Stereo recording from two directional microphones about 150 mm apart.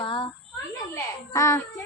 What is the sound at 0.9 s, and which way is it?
Speech, 20° left (ahead or behind).